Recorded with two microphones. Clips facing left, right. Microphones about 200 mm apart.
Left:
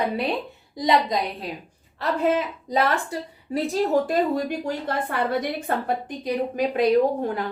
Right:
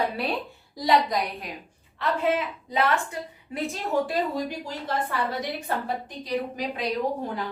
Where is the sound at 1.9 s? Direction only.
40° left (ahead or behind).